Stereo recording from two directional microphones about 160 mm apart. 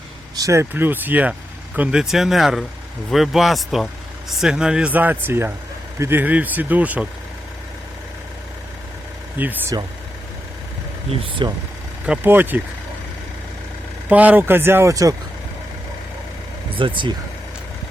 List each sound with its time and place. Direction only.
0.3 s speech: 20° right (ahead or behind)
9.4 s speech: 10° right (ahead or behind)
11.4 s speech: 30° right (ahead or behind)
12.0 s speech: 10° right (ahead or behind)
14.1 s speech: 10° right (ahead or behind)
16.7 s speech: 30° right (ahead or behind)